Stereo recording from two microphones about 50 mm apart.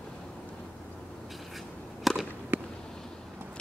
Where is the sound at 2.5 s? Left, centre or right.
Right.